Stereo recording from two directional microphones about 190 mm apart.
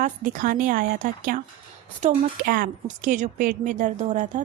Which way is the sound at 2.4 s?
45° right (ahead or behind).